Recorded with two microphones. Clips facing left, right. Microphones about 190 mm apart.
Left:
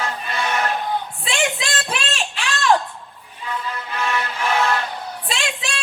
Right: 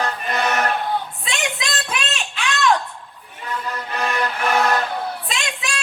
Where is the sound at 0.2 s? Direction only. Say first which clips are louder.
Right 3 dB; 60° right (ahead or behind).